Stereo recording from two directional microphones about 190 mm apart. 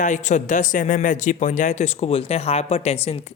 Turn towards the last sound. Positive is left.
turn(degrees=30)  # may be behind; listen again after turning